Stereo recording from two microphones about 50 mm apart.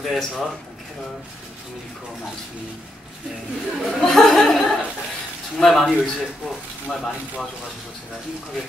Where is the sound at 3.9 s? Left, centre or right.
Centre.